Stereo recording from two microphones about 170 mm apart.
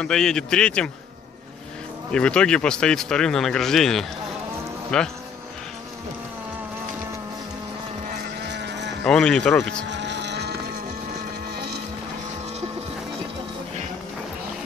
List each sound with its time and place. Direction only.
0.0 s speech: 5° left (ahead or behind)
2.1 s speech: 5° left (ahead or behind)
8.5 s livestock: 90° right
9.0 s speech: 5° left (ahead or behind)
9.8 s cattle: 90° right